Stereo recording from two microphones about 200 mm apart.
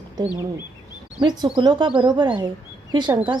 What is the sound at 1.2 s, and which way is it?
A woman's voice, 25° right (ahead or behind).